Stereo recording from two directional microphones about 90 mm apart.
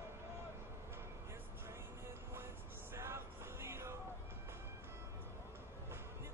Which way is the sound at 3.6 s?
30° right (ahead or behind).